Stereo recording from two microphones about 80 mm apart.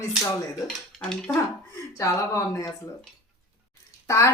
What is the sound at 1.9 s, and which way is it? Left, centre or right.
Speech, left.